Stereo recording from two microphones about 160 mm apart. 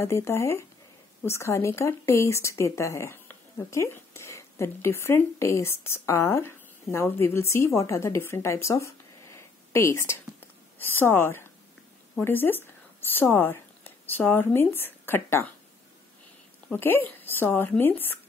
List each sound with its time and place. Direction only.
0.0 s a woman's voice: 15° left (ahead or behind)
16.6 s speech: 10° left (ahead or behind)